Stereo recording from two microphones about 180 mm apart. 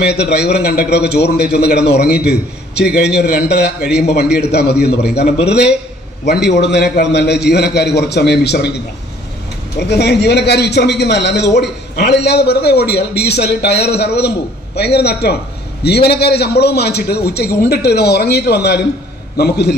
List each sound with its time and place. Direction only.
0.0 s a man's voice: 65° left (ahead or behind)
3.2 s a man's voice: 65° left (ahead or behind)